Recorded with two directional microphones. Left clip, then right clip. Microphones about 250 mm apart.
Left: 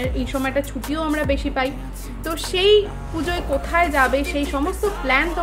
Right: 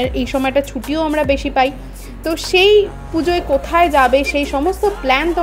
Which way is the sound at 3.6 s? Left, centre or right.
Right.